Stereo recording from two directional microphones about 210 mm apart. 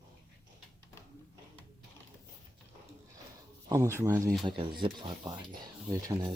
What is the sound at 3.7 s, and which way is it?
Speech, 15° right (ahead or behind).